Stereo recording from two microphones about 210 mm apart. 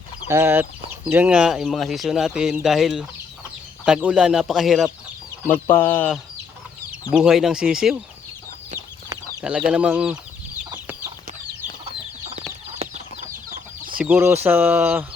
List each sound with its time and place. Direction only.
0.3 s speech: 10° right (ahead or behind)
5.6 s speech: 10° left (ahead or behind)
7.1 s speech: centre (ahead or behind)
9.4 s speech: 5° right (ahead or behind)
12.8 s chicken: 35° right (ahead or behind)
14.0 s speech: 10° right (ahead or behind)